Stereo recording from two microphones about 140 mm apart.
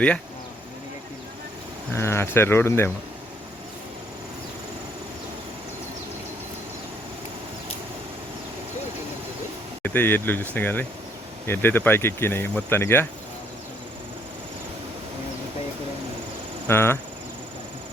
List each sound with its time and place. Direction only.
2.0 s speech: 20° left (ahead or behind)
9.8 s speech: 15° left (ahead or behind)
16.6 s speech: 15° left (ahead or behind)